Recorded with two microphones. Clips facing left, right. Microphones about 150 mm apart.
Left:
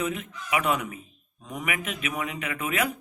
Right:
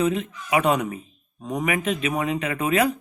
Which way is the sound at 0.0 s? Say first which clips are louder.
Right 7 dB; 35° right (ahead or behind).